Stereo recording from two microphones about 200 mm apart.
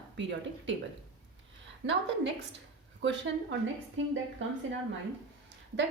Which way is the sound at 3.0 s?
65° right (ahead or behind).